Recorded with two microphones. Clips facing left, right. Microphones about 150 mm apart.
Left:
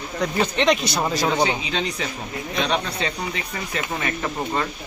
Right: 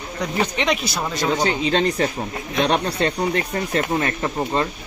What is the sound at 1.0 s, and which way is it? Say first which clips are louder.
Speech: even; 10° left (ahead or behind).